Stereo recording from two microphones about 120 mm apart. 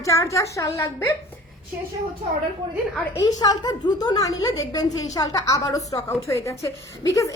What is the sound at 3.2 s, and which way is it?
A woman's voice, 35° left (ahead or behind).